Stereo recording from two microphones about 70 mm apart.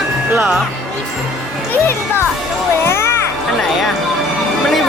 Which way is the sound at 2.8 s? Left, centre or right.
Left.